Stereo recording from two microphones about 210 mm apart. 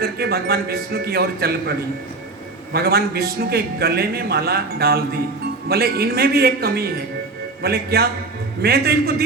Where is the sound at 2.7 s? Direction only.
45° right (ahead or behind).